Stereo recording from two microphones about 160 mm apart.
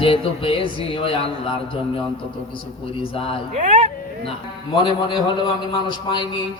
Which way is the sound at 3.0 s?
35° left (ahead or behind).